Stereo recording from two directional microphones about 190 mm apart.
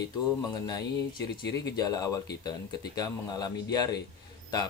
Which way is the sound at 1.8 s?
20° left (ahead or behind).